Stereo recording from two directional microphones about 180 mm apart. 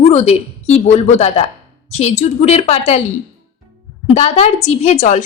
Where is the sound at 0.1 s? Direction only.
35° left (ahead or behind).